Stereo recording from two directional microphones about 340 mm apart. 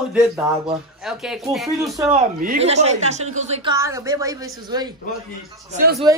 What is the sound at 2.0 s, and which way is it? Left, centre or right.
A woman's voice, centre.